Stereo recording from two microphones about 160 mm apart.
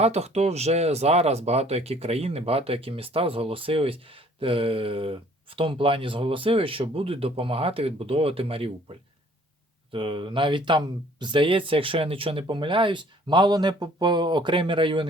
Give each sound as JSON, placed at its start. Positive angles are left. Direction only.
{"t": 0.0, "sound": "speech", "side_deg": -40}
{"t": 9.9, "sound": "speech", "side_deg": -30}